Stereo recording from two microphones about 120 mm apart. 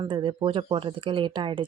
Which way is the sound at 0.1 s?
45° right (ahead or behind).